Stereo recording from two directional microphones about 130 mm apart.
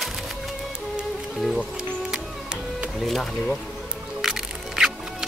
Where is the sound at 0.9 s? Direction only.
Centre (ahead or behind).